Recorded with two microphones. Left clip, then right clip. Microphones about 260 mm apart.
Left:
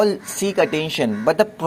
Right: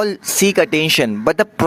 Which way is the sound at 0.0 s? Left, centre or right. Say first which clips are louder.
Right 3 dB; right.